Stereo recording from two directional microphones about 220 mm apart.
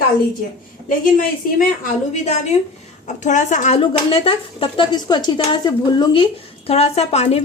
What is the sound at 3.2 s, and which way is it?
Speech, 35° left (ahead or behind).